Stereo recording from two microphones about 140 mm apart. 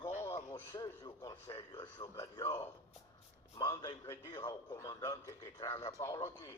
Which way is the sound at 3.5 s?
25° left (ahead or behind).